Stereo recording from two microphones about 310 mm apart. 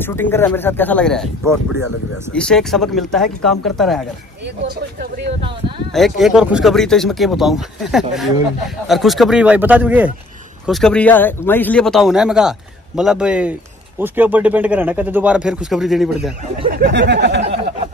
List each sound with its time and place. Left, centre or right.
0.0 s speech: centre
2.3 s speech: centre
5.9 s speech: centre
16.7 s speech: right